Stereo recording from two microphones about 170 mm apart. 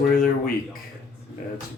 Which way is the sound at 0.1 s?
60° left (ahead or behind).